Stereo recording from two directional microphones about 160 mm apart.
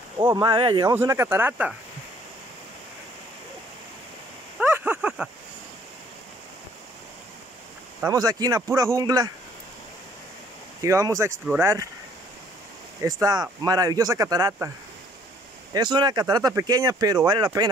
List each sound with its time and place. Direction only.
0.2 s speech: 25° right (ahead or behind)
0.9 s speech: 15° right (ahead or behind)
4.6 s a sound: 10° right (ahead or behind)
8.1 s speech: 25° right (ahead or behind)
10.8 s speech: 20° right (ahead or behind)
13.0 s speech: 25° right (ahead or behind)
15.7 s speech: 30° right (ahead or behind)